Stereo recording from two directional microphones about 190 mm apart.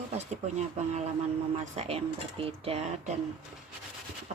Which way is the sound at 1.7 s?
35° right (ahead or behind).